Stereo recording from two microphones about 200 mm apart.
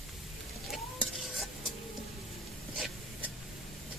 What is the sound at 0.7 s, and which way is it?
Stir, centre (ahead or behind).